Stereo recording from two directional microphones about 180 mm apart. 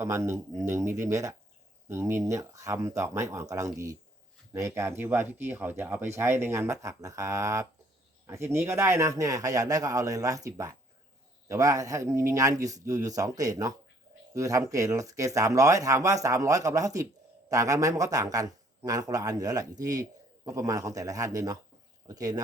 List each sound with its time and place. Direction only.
0.0 s speech: 15° right (ahead or behind)